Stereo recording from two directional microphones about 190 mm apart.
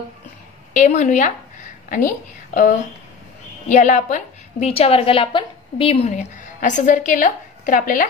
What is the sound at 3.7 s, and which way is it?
A woman's voice, 40° left (ahead or behind).